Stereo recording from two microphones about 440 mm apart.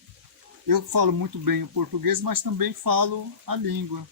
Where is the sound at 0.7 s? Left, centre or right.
Right.